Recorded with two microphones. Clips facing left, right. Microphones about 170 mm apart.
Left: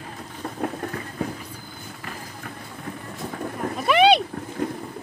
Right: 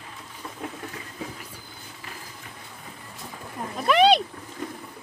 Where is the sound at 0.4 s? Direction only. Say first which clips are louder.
Left 8 dB; 50° left (ahead or behind).